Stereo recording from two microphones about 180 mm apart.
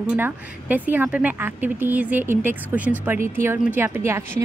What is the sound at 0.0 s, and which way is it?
A woman's voice, 10° right (ahead or behind).